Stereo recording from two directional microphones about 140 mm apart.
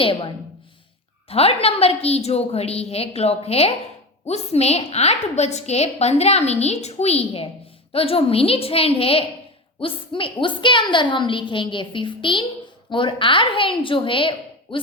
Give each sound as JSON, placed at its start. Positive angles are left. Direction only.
{"t": 0.0, "sound": "a woman's voice", "side_deg": 40}
{"t": 1.3, "sound": "a woman's voice", "side_deg": 45}